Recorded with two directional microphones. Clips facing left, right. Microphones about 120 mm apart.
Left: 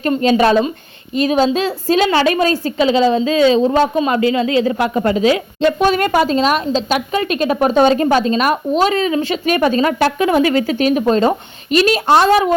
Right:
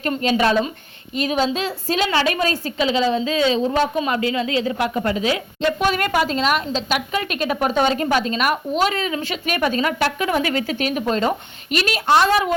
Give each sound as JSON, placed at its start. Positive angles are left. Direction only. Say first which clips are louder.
{"t": 0.2, "sound": "a woman's voice", "louder": "left 5 dB", "side_deg": 35}
{"t": 5.0, "sound": "a woman's voice", "louder": "left 7 dB", "side_deg": 30}